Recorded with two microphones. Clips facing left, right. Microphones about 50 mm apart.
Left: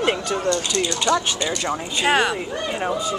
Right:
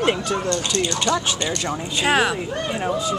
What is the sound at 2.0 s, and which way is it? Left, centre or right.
Speech, centre.